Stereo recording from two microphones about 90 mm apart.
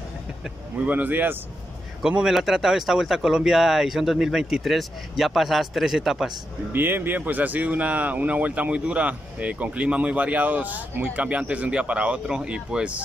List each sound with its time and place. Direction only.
0.8 s speech: 20° right (ahead or behind)
2.0 s speech: 10° right (ahead or behind)
6.7 s speech: 20° right (ahead or behind)